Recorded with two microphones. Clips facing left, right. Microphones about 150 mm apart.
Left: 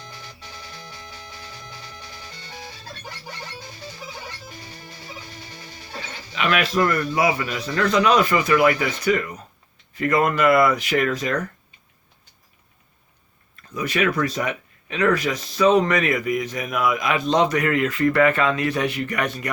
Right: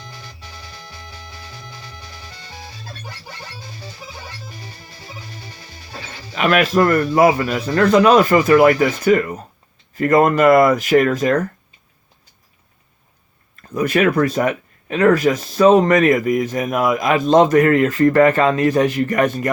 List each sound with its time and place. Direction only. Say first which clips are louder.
6.3 s speech: right 6 dB; 45° right (ahead or behind)
13.6 s speech: right 6 dB; 50° right (ahead or behind)